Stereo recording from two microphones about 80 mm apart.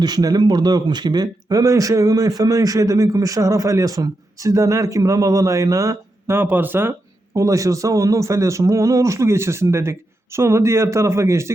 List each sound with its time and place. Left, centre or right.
0.0 s speech: right
6.3 s speech: right
7.3 s a man's voice: right